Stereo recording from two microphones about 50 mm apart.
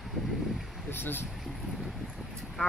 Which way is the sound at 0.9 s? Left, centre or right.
Left.